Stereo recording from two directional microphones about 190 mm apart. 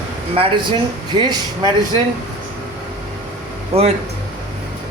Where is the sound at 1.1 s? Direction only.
25° right (ahead or behind).